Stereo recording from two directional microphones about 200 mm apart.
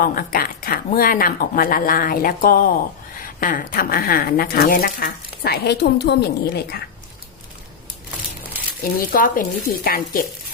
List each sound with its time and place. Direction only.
0.0 s speech: 45° left (ahead or behind)
9.1 s speech: 45° left (ahead or behind)